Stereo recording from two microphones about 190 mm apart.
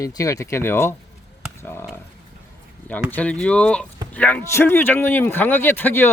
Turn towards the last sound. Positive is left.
turn(degrees=10)  # may be behind; listen again after turning